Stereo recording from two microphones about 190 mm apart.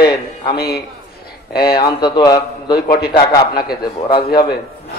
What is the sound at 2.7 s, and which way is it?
Speech, 50° left (ahead or behind).